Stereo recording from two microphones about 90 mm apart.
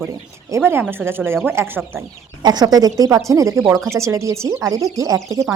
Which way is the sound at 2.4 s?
50° right (ahead or behind).